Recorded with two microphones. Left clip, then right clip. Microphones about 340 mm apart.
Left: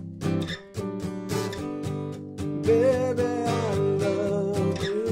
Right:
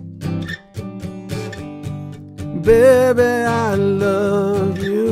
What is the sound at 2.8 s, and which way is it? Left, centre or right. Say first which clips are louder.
Music: right 15 dB; right.